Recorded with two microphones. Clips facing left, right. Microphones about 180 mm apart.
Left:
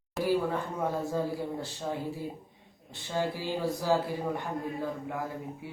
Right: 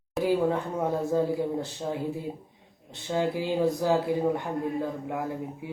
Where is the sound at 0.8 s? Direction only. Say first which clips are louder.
Right 5 dB; 15° right (ahead or behind).